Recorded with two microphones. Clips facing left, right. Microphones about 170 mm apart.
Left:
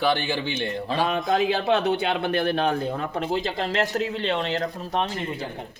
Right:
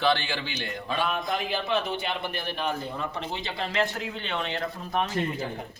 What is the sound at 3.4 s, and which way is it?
Speech, 40° left (ahead or behind).